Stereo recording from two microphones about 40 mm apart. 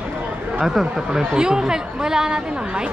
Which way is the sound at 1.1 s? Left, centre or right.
Centre.